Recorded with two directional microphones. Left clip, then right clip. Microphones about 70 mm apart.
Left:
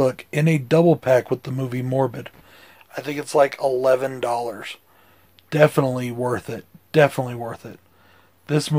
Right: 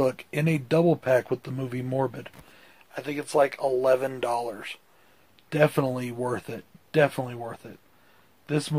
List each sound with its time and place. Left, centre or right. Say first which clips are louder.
0.0 s a man's voice: left 5 dB; left